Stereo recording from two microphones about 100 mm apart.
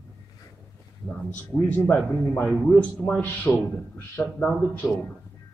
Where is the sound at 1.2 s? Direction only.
20° left (ahead or behind).